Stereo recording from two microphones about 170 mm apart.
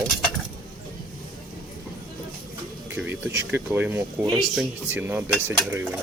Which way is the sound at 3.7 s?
15° right (ahead or behind).